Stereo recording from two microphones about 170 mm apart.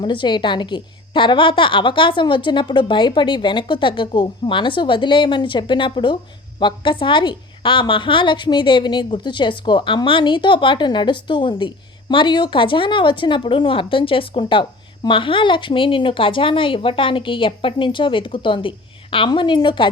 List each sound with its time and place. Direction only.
0.0 s a woman's voice: 30° left (ahead or behind)